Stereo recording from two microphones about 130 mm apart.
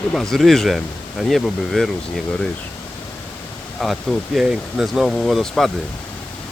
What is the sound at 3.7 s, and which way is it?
Speech, centre (ahead or behind).